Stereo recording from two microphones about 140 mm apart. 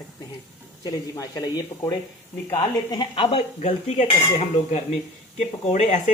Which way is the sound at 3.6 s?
55° left (ahead or behind).